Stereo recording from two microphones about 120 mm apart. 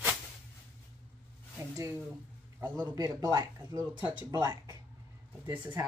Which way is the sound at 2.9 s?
35° right (ahead or behind).